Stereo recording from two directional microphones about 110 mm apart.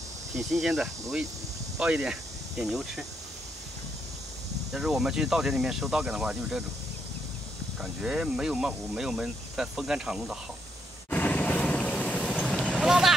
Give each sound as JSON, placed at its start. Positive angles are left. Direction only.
{"t": 0.4, "sound": "speech", "side_deg": 0}
{"t": 4.7, "sound": "speech", "side_deg": -5}
{"t": 7.8, "sound": "speech", "side_deg": -5}
{"t": 11.1, "sound": "vehicle", "side_deg": 15}
{"t": 12.7, "sound": "speech", "side_deg": -5}